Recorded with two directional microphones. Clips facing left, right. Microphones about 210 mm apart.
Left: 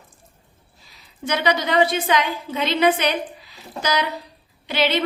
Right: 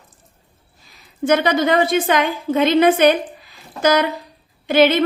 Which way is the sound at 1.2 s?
50° right (ahead or behind).